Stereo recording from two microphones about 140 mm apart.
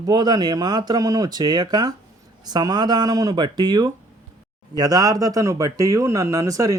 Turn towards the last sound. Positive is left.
turn(degrees=-25)  # may be behind; listen again after turning